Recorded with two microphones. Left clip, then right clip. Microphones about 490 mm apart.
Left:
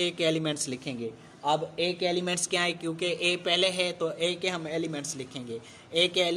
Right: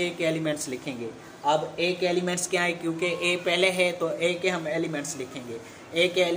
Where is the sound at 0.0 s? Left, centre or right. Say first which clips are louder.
Right 1 dB; left.